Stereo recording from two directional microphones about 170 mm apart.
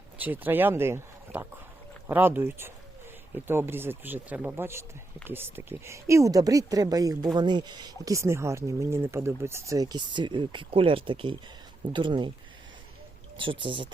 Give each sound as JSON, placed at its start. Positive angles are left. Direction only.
{"t": 0.2, "sound": "speech", "side_deg": -10}
{"t": 13.3, "sound": "speech", "side_deg": -30}